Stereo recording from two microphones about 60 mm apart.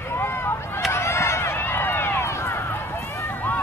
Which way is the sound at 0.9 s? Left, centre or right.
Left.